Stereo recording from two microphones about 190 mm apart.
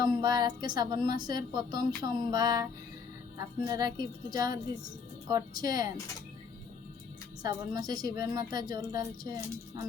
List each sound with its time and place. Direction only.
0.0 s a woman's voice: 20° right (ahead or behind)
7.4 s a woman's voice: 20° right (ahead or behind)